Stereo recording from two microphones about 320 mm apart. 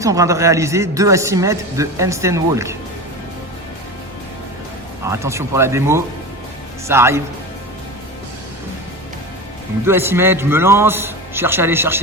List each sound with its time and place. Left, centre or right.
0.0 s a man's voice: centre
5.0 s a man's voice: centre
9.8 s a man's voice: centre